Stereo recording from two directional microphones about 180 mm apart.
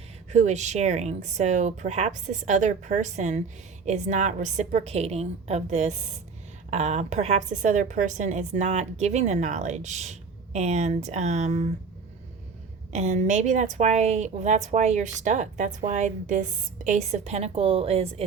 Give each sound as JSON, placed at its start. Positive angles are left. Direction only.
{"t": 0.3, "sound": "a woman's voice", "side_deg": -40}
{"t": 12.9, "sound": "a woman's voice", "side_deg": -40}